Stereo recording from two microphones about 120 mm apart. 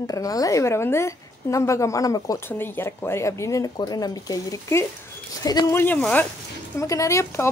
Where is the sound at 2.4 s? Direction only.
15° left (ahead or behind).